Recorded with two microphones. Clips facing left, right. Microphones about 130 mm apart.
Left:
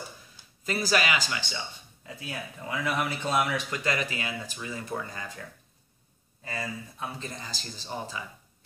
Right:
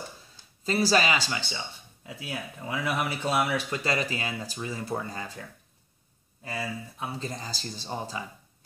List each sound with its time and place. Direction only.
0.7 s speech: 30° right (ahead or behind)
2.0 s speech: 10° right (ahead or behind)
3.7 s speech: 30° right (ahead or behind)
6.4 s speech: 10° right (ahead or behind)
7.2 s speech: 35° right (ahead or behind)